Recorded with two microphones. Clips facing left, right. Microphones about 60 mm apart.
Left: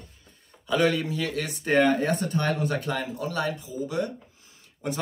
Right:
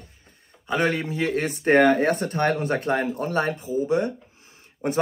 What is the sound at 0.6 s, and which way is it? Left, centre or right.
Speech, right.